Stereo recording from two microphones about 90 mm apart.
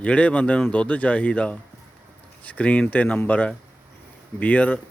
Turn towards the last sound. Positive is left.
turn(degrees=15)  # may be behind; listen again after turning